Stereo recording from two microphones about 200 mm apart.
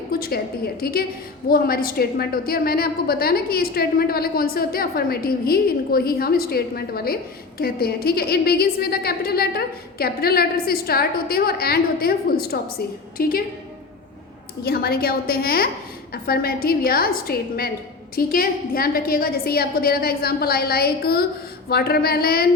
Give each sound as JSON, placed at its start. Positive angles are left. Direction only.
{"t": 0.1, "sound": "a woman's voice", "side_deg": 50}
{"t": 14.6, "sound": "a woman's voice", "side_deg": 50}